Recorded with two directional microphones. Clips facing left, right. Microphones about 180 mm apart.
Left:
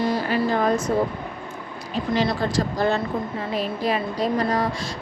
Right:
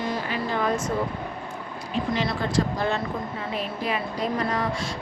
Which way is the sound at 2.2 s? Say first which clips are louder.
Left 4 dB; 35° left (ahead or behind).